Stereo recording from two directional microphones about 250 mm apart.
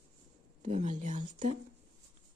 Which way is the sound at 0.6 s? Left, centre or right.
Right.